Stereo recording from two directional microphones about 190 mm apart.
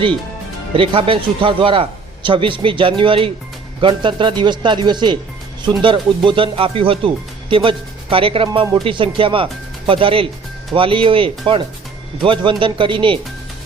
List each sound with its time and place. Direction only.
0.7 s a man's voice: 30° right (ahead or behind)